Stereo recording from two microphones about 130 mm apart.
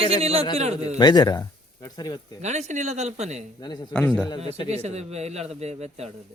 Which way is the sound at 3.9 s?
10° left (ahead or behind).